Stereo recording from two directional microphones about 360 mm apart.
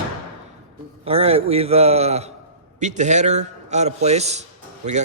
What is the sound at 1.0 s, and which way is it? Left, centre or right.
A man's voice, centre.